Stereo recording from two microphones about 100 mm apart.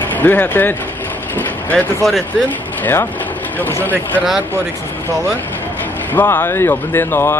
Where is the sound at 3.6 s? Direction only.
20° left (ahead or behind).